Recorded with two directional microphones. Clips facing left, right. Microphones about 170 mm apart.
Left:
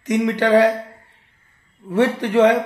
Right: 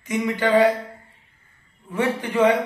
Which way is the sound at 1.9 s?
75° left (ahead or behind).